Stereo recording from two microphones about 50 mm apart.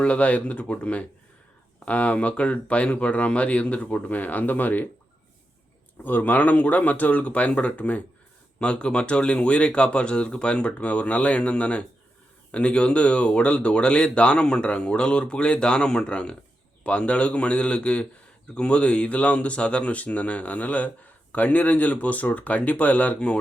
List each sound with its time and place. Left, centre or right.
0.0 s speech: left
6.0 s speech: left